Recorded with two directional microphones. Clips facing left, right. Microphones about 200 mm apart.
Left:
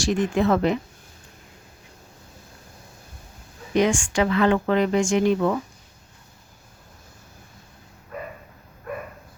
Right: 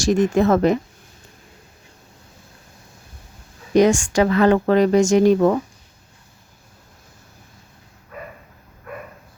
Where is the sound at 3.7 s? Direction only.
40° right (ahead or behind).